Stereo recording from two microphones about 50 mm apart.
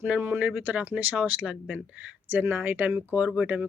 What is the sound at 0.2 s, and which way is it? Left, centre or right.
Speech, right.